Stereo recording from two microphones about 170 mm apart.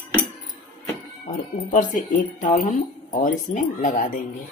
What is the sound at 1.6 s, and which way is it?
Speech, 50° left (ahead or behind).